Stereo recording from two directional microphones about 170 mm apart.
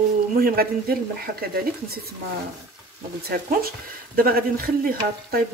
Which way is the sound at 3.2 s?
60° right (ahead or behind).